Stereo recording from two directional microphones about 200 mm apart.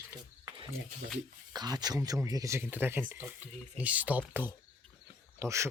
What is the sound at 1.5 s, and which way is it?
Speech, 20° right (ahead or behind).